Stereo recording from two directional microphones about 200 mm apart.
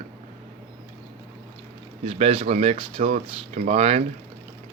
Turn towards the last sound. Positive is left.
turn(degrees=-30)  # may be behind; listen again after turning